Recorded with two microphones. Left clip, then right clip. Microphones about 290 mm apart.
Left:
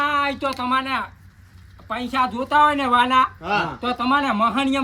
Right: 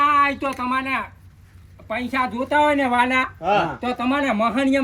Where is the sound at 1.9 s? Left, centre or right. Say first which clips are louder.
Left 1 dB; centre.